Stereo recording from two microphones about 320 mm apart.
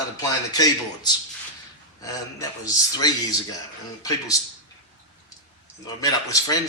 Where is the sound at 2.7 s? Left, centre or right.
Centre.